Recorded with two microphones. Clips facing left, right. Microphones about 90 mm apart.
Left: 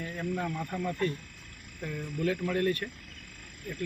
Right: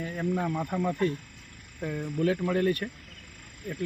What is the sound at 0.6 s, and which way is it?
Speech, 20° right (ahead or behind).